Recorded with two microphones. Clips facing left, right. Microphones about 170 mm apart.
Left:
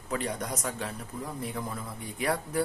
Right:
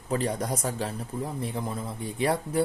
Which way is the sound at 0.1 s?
30° right (ahead or behind).